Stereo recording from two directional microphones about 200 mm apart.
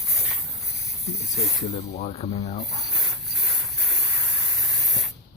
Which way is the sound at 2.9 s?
Centre (ahead or behind).